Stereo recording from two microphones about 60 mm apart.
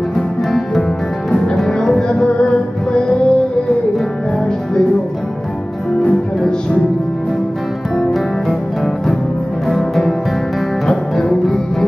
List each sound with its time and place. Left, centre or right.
1.6 s music: centre
9.7 s music: centre
10.9 s music: centre